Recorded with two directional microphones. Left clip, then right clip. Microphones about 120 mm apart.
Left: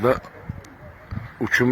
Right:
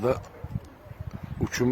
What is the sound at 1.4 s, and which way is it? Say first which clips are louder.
Speech: left 11 dB; centre (ahead or behind).